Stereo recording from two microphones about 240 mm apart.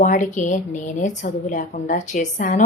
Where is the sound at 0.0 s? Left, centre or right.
Left.